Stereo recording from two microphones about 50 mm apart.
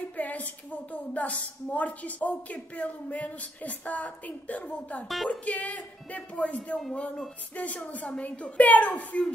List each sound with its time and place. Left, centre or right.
0.2 s a woman's voice: left
5.0 s speech: centre
5.3 s speech: left